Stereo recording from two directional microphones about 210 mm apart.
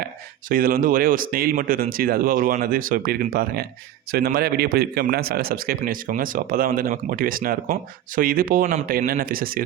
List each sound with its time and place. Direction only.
0.4 s a man's voice: 45° right (ahead or behind)